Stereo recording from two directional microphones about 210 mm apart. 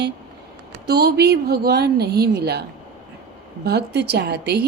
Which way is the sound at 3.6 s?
50° right (ahead or behind).